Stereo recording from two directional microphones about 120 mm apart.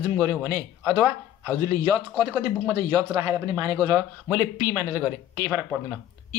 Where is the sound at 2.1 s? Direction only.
15° right (ahead or behind).